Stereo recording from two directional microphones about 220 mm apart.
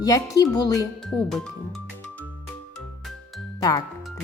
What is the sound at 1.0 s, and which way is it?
Speech, centre (ahead or behind).